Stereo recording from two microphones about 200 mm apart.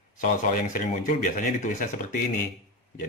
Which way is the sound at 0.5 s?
40° left (ahead or behind).